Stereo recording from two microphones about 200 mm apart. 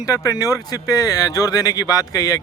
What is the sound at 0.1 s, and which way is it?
Speech, 20° left (ahead or behind).